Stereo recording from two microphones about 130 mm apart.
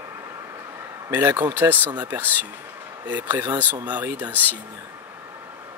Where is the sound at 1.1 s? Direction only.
15° right (ahead or behind).